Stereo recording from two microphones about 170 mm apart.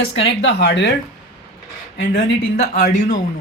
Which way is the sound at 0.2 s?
90° left.